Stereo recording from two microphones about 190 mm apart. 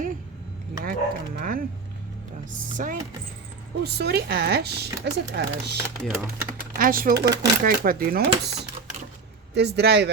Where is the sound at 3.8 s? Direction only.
60° right (ahead or behind).